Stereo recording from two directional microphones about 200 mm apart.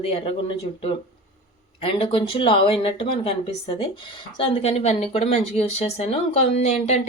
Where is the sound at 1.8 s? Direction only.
25° left (ahead or behind).